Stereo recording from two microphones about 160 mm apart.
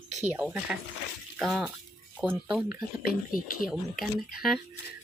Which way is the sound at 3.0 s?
65° left (ahead or behind).